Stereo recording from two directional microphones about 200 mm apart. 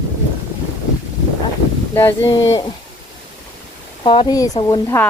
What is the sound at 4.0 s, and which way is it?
Speech, 25° left (ahead or behind).